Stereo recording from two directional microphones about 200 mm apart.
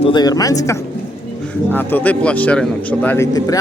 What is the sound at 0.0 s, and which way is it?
A man's voice, 20° left (ahead or behind).